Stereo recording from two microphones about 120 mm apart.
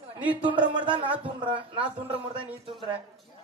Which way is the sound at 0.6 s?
40° right (ahead or behind).